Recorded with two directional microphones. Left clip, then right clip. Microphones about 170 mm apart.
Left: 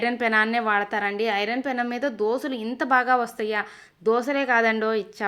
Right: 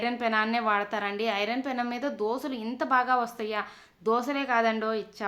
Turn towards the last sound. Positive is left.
turn(degrees=25)  # may be behind; listen again after turning